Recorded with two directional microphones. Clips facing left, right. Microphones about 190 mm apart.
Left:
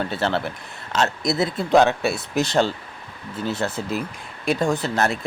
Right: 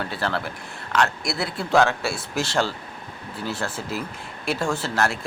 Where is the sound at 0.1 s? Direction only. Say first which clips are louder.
Left 4 dB; 25° left (ahead or behind).